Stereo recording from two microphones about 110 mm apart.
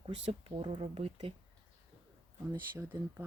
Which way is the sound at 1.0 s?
70° right (ahead or behind).